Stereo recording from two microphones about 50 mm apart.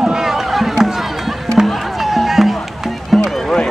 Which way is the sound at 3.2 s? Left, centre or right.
Centre.